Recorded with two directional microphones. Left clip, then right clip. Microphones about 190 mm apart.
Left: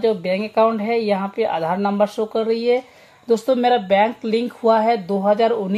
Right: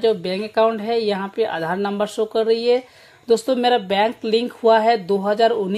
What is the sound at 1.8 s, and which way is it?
Speech, 50° right (ahead or behind).